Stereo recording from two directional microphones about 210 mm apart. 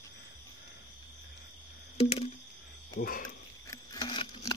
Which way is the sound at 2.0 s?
25° left (ahead or behind).